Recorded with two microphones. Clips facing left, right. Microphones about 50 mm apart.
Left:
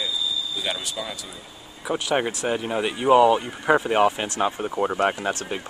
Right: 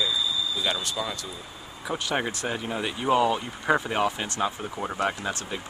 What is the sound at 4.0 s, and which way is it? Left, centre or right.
Speech, left.